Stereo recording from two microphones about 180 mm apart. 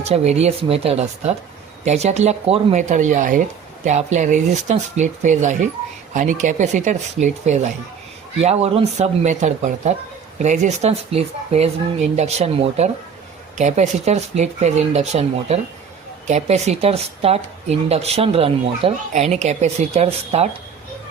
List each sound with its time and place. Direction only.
0.0 s speech: 35° right (ahead or behind)